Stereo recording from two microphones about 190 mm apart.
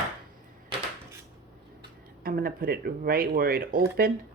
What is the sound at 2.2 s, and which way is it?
Speech, 50° right (ahead or behind).